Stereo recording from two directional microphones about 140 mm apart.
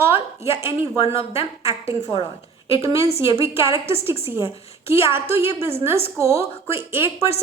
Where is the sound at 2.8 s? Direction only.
20° right (ahead or behind).